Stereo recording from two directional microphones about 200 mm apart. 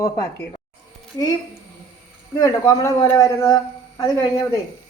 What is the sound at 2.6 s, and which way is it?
Speech, 15° left (ahead or behind).